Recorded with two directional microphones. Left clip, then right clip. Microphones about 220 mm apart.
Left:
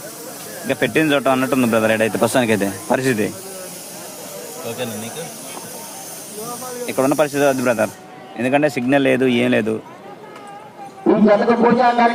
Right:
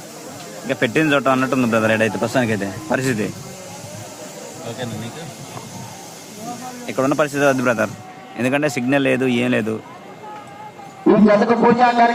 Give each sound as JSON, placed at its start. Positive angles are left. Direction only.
{"t": 0.7, "sound": "speech", "side_deg": 5}
{"t": 6.8, "sound": "speech", "side_deg": 5}
{"t": 11.1, "sound": "speech", "side_deg": -20}